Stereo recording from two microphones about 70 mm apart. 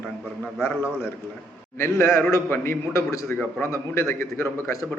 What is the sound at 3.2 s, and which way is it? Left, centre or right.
A man's voice, left.